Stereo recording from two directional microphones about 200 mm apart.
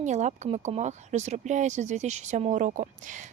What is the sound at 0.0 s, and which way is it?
Speech, 35° right (ahead or behind).